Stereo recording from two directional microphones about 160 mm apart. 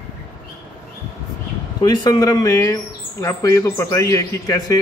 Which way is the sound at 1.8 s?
25° left (ahead or behind).